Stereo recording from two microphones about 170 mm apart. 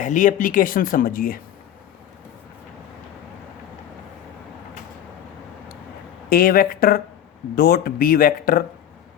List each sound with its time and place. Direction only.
0.0 s speech: 50° left (ahead or behind)
6.2 s speech: 60° left (ahead or behind)